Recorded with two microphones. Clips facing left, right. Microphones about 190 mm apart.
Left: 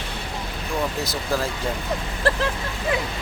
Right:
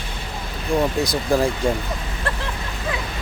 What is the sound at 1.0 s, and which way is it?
Speech, 15° right (ahead or behind).